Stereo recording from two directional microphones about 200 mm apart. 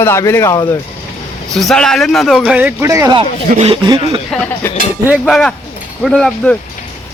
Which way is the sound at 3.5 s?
30° right (ahead or behind).